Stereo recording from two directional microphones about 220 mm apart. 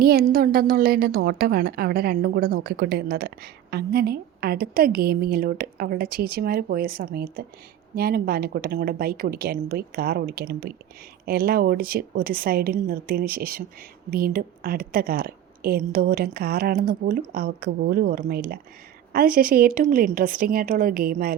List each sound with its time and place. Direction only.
0.0 s a woman's voice: 45° right (ahead or behind)